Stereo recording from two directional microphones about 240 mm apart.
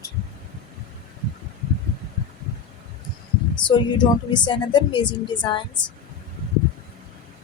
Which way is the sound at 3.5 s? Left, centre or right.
Centre.